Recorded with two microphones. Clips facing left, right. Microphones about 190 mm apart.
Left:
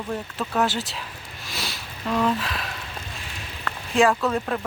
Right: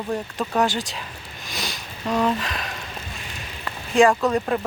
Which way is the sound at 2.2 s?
Centre (ahead or behind).